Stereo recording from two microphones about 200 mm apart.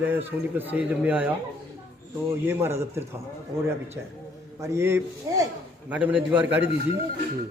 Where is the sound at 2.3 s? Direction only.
10° right (ahead or behind).